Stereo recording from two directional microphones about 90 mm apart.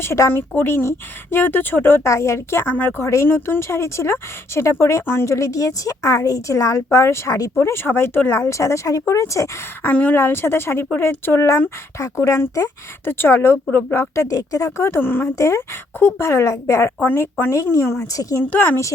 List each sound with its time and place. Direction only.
0.0 s speech: 30° left (ahead or behind)
7.5 s speech: 25° left (ahead or behind)
9.8 s speech: 20° left (ahead or behind); by 16.9 s 35° left (ahead or behind)
17.0 s speech: 25° left (ahead or behind)
17.5 s speech: 35° left (ahead or behind)
18.5 s speech: 20° left (ahead or behind)